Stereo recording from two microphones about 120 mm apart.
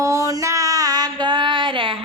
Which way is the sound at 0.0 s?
25° right (ahead or behind).